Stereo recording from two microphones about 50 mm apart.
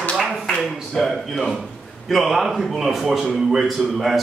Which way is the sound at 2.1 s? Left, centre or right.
Centre.